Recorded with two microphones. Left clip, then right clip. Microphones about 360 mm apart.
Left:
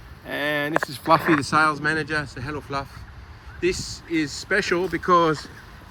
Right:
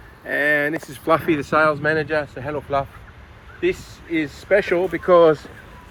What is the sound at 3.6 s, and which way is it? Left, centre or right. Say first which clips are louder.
Speech: right 2 dB; centre.